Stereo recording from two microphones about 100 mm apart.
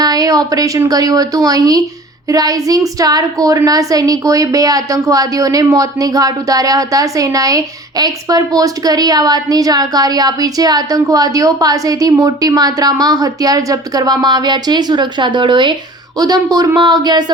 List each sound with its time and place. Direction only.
0.0 s a woman's voice: 40° right (ahead or behind)
16.1 s a woman's voice: 40° right (ahead or behind)